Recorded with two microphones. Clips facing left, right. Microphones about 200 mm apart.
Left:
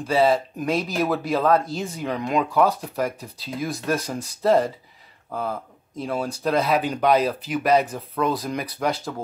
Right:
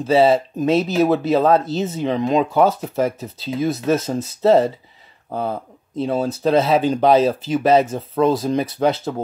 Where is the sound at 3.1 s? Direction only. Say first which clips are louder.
Right 7 dB; 25° right (ahead or behind).